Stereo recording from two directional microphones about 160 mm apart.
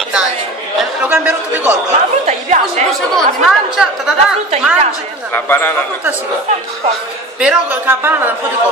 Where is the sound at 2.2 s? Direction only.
50° right (ahead or behind).